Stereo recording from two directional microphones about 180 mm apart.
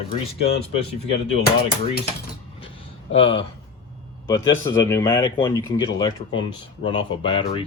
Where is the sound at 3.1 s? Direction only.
30° left (ahead or behind).